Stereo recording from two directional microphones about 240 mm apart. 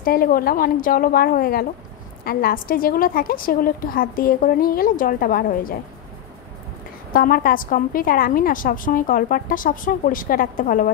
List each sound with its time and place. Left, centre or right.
0.0 s a woman's voice: left
7.1 s a woman's voice: left